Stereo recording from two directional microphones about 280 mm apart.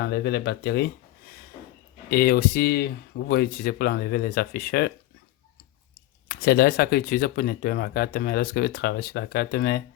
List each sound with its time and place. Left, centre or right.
0.0 s speech: left
2.0 s speech: left
6.2 s speech: left